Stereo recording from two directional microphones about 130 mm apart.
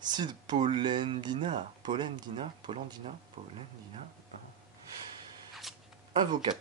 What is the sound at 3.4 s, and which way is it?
Speech, 70° right (ahead or behind).